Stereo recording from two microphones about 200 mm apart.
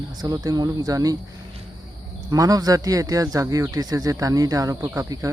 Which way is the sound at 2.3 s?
15° right (ahead or behind).